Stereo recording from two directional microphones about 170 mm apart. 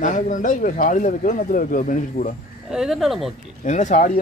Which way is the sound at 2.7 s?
Centre (ahead or behind).